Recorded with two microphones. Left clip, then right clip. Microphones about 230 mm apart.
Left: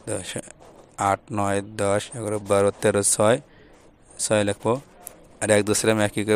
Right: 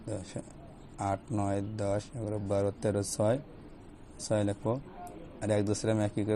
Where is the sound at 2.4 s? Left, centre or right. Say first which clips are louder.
Left 12 dB; left.